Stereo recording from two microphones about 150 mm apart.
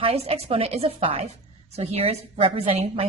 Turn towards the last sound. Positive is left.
turn(degrees=-45)  # may be behind; listen again after turning